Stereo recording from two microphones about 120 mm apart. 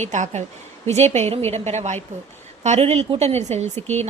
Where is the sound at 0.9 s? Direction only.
65° right (ahead or behind).